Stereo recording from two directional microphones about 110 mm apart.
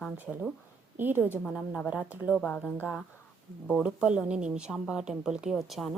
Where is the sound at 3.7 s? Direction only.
5° right (ahead or behind).